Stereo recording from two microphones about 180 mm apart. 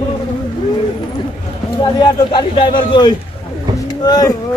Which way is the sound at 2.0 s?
25° left (ahead or behind).